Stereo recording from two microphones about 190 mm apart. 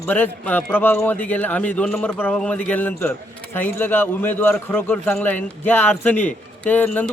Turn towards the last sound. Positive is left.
turn(degrees=10)  # may be behind; listen again after turning